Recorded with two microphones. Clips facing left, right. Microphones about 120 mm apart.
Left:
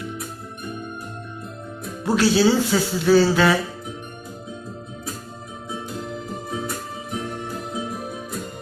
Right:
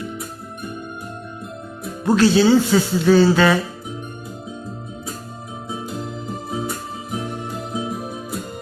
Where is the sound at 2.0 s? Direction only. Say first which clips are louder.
Right 3 dB; 5° left (ahead or behind).